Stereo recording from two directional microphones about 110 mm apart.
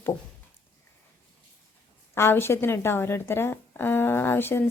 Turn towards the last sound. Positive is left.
turn(degrees=20)  # may be behind; listen again after turning